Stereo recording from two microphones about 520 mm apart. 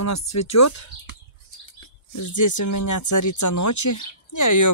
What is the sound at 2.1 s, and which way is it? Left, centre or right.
Speech, left.